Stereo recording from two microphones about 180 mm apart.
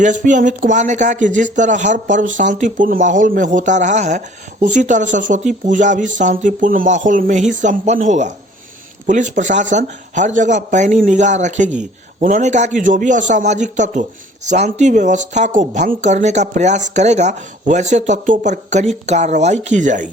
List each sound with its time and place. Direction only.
0.0 s speech: 45° right (ahead or behind)